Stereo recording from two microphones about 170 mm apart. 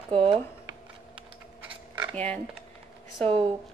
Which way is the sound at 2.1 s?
10° left (ahead or behind).